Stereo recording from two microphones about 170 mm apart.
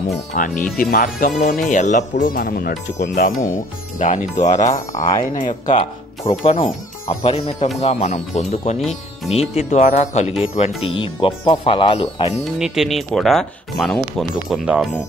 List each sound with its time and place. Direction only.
0.3 s speech: 50° left (ahead or behind)
10.8 s speech: 30° left (ahead or behind)
12.5 s speech: centre (ahead or behind)